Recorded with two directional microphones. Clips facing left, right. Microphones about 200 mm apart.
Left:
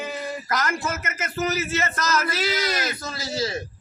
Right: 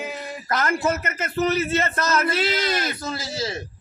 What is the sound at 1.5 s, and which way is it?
A man's voice, 30° right (ahead or behind).